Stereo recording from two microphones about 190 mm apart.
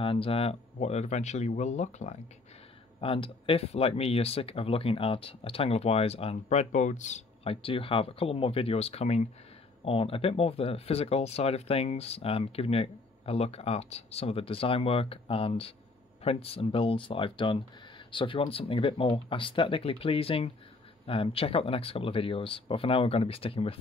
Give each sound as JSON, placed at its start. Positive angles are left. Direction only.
{"t": 0.0, "sound": "speech", "side_deg": 30}